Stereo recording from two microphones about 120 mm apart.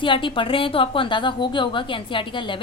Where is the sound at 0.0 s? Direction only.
45° left (ahead or behind).